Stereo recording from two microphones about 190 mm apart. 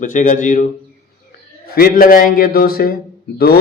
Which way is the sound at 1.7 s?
50° left (ahead or behind).